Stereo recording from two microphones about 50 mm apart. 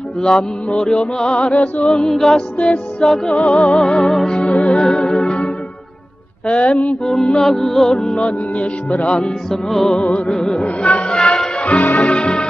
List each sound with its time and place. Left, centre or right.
0.2 s music: centre
1.9 s music: centre
4.3 s music: left
4.7 s music: centre
6.4 s music: left
7.4 s music: centre
8.1 s music: left
9.1 s music: centre
11.6 s music: left